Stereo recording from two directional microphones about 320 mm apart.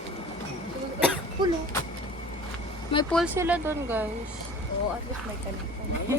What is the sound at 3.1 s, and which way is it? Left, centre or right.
Speech, centre.